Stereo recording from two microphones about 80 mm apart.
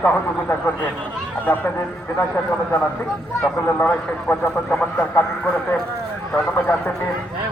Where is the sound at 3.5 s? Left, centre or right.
Centre.